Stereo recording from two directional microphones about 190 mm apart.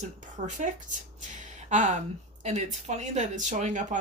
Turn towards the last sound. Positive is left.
turn(degrees=-40)  # may be behind; listen again after turning